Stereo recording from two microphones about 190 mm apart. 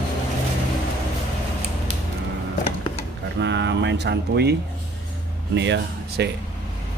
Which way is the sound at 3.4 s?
65° right (ahead or behind).